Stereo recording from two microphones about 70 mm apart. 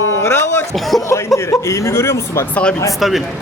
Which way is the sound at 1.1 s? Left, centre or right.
Left.